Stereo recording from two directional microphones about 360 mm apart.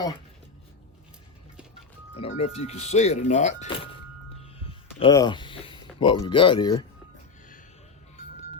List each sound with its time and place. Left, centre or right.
2.1 s speech: centre